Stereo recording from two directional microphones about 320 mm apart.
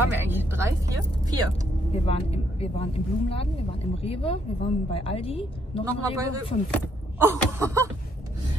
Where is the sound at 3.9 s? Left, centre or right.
Centre.